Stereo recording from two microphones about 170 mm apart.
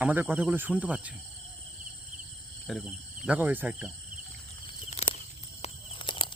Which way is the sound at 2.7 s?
Centre (ahead or behind).